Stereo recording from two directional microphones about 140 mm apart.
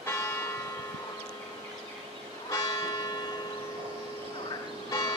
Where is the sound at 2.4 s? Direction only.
25° left (ahead or behind).